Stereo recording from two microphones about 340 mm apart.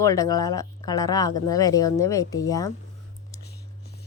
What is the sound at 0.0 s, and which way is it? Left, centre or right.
Speech, centre.